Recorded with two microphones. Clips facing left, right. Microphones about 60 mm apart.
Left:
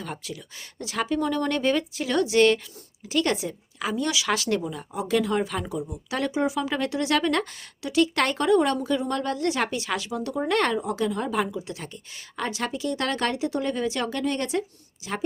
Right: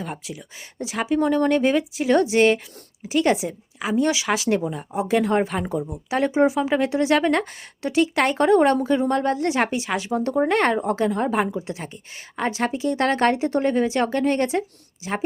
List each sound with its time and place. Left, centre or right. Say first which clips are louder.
0.0 s speech: right 3 dB; centre
1.2 s a woman's voice: right 8 dB; right
3.9 s speech: right 5 dB; right
8.0 s speech: right 4 dB; centre
8.4 s speech: right 5 dB; right
10.1 s speech: right 7 dB; right